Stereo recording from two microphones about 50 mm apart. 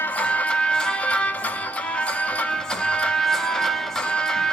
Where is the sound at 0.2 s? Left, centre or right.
Left.